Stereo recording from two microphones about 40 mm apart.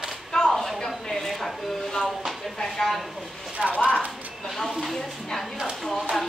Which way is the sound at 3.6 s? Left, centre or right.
Right.